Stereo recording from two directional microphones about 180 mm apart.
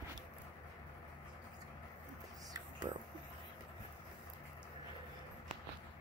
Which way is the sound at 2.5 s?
25° right (ahead or behind).